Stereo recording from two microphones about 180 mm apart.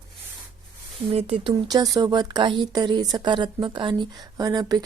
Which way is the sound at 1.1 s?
30° right (ahead or behind).